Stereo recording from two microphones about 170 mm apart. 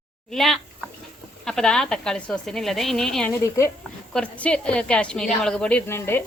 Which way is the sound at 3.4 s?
15° left (ahead or behind).